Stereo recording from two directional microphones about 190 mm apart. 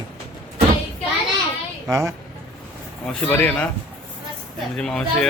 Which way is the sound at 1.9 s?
15° right (ahead or behind).